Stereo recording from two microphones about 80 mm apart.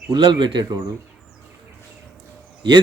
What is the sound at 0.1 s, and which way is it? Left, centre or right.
Speech, right.